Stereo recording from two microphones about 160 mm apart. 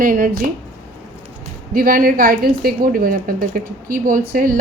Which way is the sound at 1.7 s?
65° right (ahead or behind).